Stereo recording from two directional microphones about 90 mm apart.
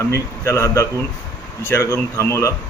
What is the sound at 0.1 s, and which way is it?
Speech, 30° left (ahead or behind).